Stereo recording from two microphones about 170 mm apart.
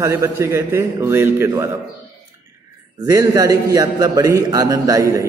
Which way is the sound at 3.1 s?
20° right (ahead or behind).